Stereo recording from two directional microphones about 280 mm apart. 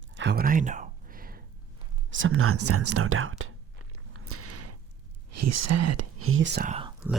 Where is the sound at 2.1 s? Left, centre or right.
Right.